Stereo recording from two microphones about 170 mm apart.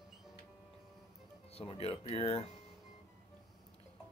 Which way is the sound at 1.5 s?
35° left (ahead or behind).